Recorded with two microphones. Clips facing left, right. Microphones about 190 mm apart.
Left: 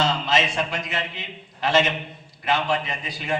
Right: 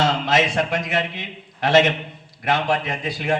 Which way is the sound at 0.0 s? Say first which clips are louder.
Right 3 dB; 50° right (ahead or behind).